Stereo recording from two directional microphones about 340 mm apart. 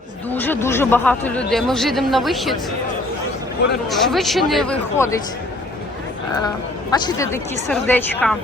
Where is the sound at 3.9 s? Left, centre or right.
Centre.